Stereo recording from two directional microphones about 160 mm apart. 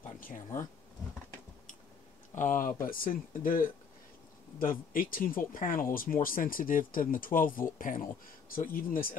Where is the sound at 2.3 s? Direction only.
55° left (ahead or behind).